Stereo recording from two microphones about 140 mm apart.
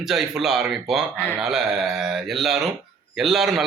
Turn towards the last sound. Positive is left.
turn(degrees=0)  # may be behind; listen again after turning